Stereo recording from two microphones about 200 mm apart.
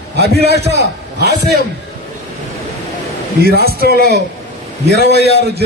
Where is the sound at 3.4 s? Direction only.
50° right (ahead or behind).